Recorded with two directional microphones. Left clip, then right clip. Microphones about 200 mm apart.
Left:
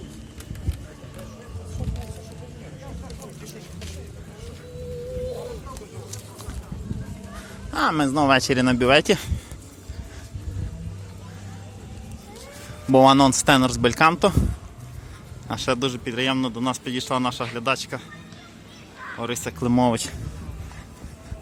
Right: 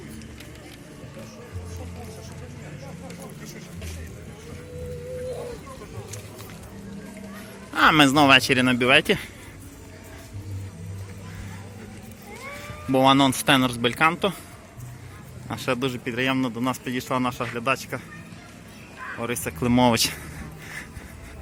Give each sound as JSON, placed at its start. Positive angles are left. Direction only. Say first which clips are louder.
{"t": 7.9, "sound": "speech", "louder": "right 4 dB", "side_deg": 0}
{"t": 8.4, "sound": "speech", "louder": "even", "side_deg": 15}
{"t": 12.9, "sound": "speech", "louder": "left 4 dB", "side_deg": 25}
{"t": 15.4, "sound": "speech", "louder": "left 2 dB", "side_deg": 15}
{"t": 19.2, "sound": "speech", "louder": "even", "side_deg": 10}